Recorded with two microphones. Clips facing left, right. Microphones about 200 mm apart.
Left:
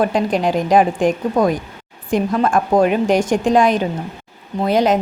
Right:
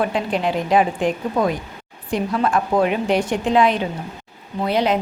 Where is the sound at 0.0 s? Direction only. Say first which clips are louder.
Left 4 dB; 45° left (ahead or behind).